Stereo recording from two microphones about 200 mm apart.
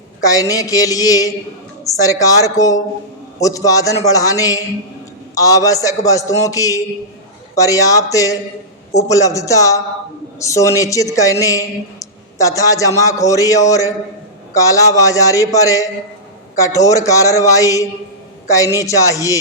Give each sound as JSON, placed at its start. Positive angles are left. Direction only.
{"t": 0.2, "sound": "a woman's voice", "side_deg": 15}